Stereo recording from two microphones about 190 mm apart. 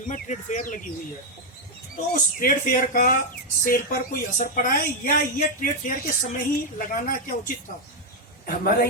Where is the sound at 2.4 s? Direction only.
50° left (ahead or behind).